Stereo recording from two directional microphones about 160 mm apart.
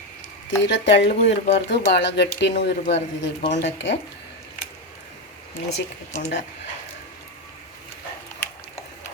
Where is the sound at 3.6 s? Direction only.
90° left.